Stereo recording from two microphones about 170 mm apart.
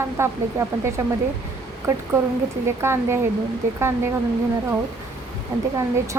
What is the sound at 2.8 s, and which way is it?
Speech, 15° right (ahead or behind).